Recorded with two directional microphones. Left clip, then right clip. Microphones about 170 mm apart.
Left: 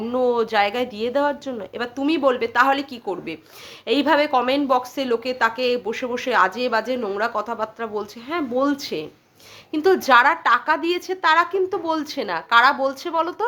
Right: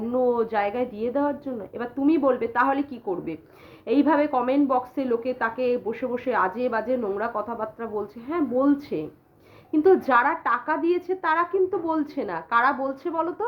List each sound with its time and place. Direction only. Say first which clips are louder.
0.1 s a woman's voice: left 3 dB; 15° left (ahead or behind)